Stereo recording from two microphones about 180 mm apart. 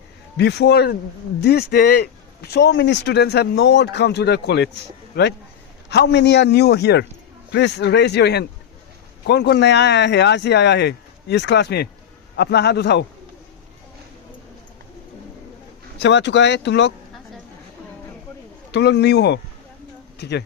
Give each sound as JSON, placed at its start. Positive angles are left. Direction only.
{"t": 0.3, "sound": "a man's voice", "side_deg": 65}
{"t": 16.0, "sound": "a man's voice", "side_deg": 75}
{"t": 18.7, "sound": "a man's voice", "side_deg": 70}